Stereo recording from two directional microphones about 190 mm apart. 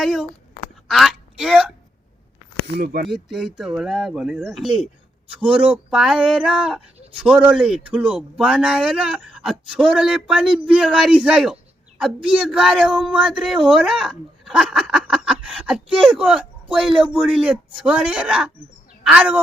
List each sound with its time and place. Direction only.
0.0 s speech: centre (ahead or behind)
2.7 s speech: 60° right (ahead or behind)
3.1 s a woman's voice: centre (ahead or behind)